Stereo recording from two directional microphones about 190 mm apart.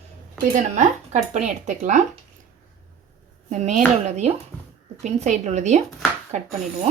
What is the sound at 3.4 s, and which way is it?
Speech, 40° right (ahead or behind).